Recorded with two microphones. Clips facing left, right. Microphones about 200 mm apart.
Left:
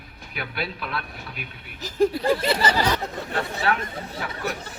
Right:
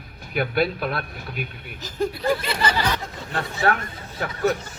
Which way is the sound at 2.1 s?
35° left (ahead or behind).